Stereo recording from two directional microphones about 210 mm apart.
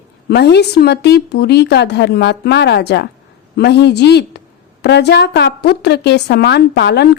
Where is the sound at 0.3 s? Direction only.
50° left (ahead or behind).